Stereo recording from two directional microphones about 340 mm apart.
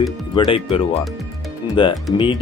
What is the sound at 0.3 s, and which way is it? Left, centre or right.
Speech, centre.